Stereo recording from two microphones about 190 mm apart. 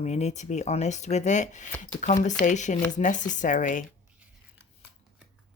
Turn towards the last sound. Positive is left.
turn(degrees=40)  # may be behind; listen again after turning